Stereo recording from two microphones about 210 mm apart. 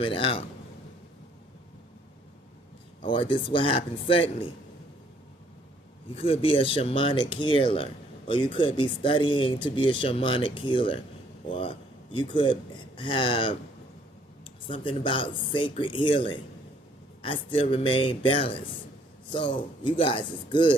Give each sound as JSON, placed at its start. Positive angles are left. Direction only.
{"t": 0.0, "sound": "speech", "side_deg": 25}
{"t": 3.0, "sound": "speech", "side_deg": 25}
{"t": 6.1, "sound": "speech", "side_deg": 25}